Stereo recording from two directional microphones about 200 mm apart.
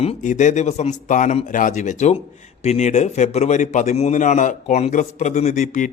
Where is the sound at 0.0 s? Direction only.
35° left (ahead or behind).